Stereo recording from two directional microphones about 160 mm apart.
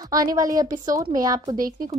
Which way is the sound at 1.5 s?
60° right (ahead or behind).